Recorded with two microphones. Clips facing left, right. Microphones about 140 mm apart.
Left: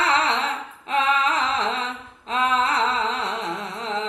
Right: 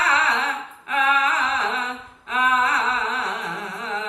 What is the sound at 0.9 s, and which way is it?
Music, 25° left (ahead or behind).